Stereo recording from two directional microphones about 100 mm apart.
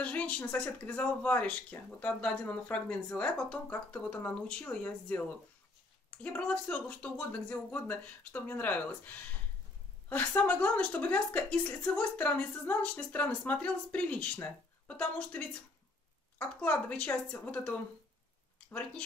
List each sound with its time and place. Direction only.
0.0 s speech: 15° left (ahead or behind)